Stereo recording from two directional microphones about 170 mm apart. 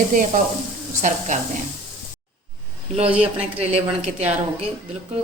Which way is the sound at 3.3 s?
40° right (ahead or behind).